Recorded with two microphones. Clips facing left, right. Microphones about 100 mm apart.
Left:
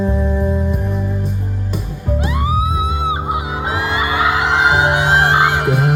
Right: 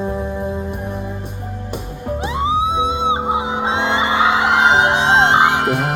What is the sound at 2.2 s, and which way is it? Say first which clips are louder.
Music: right 2 dB; 25° right (ahead or behind).